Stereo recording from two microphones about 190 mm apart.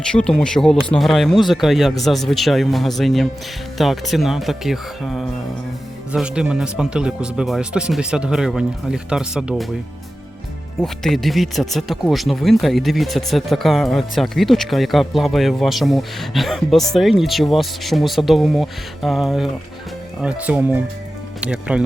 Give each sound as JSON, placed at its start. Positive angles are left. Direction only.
{"t": 0.0, "sound": "speech", "side_deg": 5}
{"t": 10.8, "sound": "speech", "side_deg": 0}